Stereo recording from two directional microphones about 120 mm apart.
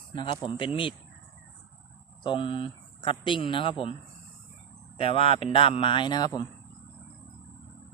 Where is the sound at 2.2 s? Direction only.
45° left (ahead or behind).